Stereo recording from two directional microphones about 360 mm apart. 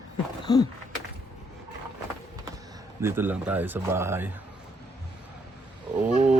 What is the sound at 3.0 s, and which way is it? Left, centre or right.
Speech, centre.